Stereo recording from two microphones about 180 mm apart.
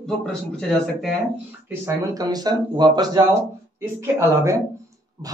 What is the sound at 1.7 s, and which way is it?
Speech, 20° right (ahead or behind).